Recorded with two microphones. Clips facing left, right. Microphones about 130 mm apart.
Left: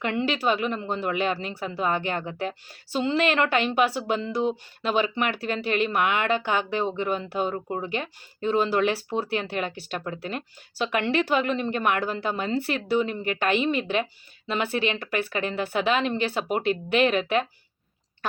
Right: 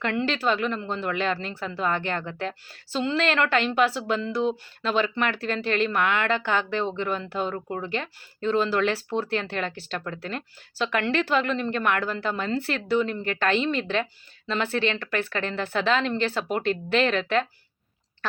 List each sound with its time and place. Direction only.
0.0 s speech: 15° left (ahead or behind)